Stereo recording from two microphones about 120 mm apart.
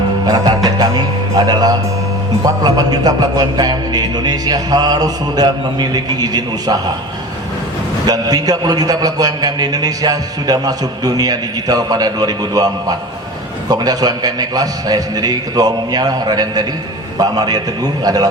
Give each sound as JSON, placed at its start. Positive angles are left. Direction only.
{"t": 0.3, "sound": "a man's voice", "side_deg": -30}
{"t": 8.0, "sound": "a man's voice", "side_deg": -35}